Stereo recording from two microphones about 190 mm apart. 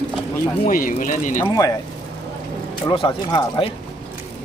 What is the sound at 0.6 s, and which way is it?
Speech, 45° left (ahead or behind).